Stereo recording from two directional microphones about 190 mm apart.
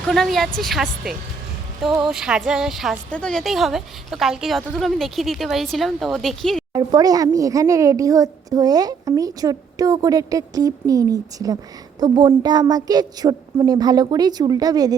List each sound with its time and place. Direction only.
0.1 s a woman's voice: centre (ahead or behind)
6.7 s a woman's voice: 20° right (ahead or behind)